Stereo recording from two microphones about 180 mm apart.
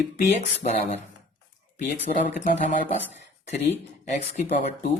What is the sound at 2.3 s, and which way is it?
Speech, 40° left (ahead or behind).